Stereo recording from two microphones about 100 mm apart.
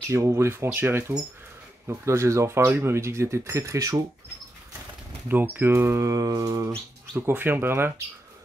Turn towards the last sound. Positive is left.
turn(degrees=-25)  # may be behind; listen again after turning